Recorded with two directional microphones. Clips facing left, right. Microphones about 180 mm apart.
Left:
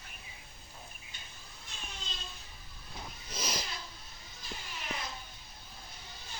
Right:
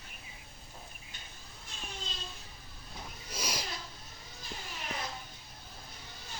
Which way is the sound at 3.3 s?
10° right (ahead or behind).